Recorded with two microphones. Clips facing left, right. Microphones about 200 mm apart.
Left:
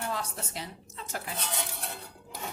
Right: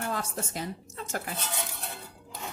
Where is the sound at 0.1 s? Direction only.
50° right (ahead or behind).